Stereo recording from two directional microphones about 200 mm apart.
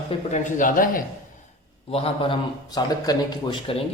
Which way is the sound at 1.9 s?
30° left (ahead or behind).